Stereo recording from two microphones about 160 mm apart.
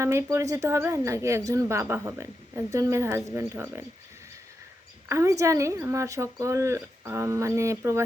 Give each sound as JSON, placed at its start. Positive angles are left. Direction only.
{"t": 0.0, "sound": "speech", "side_deg": -15}
{"t": 5.0, "sound": "speech", "side_deg": -20}